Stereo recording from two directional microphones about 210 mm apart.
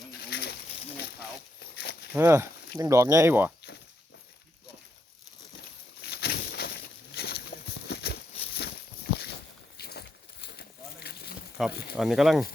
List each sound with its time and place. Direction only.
0.3 s bird: 50° left (ahead or behind)
1.8 s walk: 50° left (ahead or behind)
2.1 s speech: 10° right (ahead or behind)
6.0 s a sound: 50° left (ahead or behind)
9.7 s a sound: 50° left (ahead or behind)
11.6 s speech: centre (ahead or behind)